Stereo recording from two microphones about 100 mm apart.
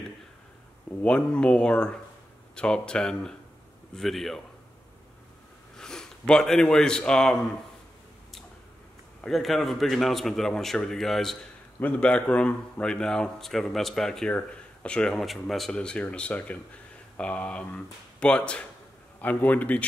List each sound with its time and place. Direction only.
1.0 s a man's voice: 10° left (ahead or behind)
5.8 s speech: 5° left (ahead or behind)
9.2 s a man's voice: centre (ahead or behind)